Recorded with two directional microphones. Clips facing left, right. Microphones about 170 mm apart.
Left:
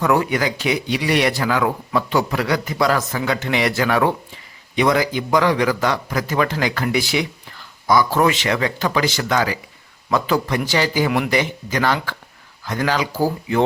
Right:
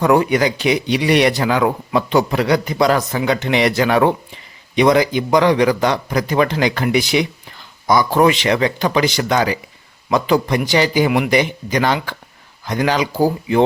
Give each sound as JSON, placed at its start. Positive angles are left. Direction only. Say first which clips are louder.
{"t": 0.0, "sound": "speech", "louder": "right 4 dB", "side_deg": -20}